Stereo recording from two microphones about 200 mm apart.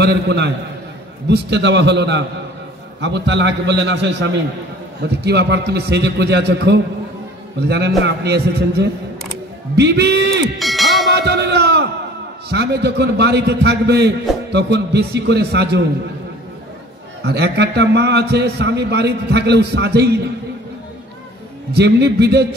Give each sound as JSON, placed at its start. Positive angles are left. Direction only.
{"t": 0.0, "sound": "a man's voice", "side_deg": -55}
{"t": 10.6, "sound": "a sound", "side_deg": 0}
{"t": 11.1, "sound": "a sound", "side_deg": -55}
{"t": 12.4, "sound": "a man's voice", "side_deg": -55}
{"t": 17.2, "sound": "a man's voice", "side_deg": -55}
{"t": 21.7, "sound": "a man's voice", "side_deg": -55}